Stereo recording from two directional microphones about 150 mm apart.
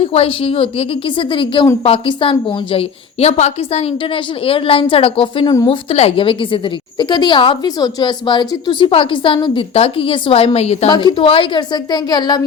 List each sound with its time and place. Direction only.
0.0 s a woman's voice: 40° left (ahead or behind)
10.8 s a woman's voice: 30° left (ahead or behind)